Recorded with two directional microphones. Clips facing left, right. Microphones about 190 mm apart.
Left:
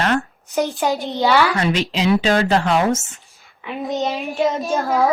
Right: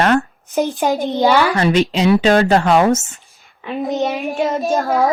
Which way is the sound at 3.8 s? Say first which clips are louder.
Right 3 dB; 20° right (ahead or behind).